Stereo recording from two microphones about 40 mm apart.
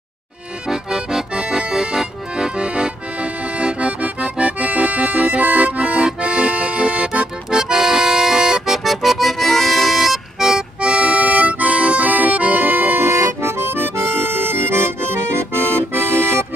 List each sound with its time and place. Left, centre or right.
0.7 s accordion: centre; by 7.1 s right
7.5 s accordion: centre
10.8 s accordion: right
13.0 s accordion: right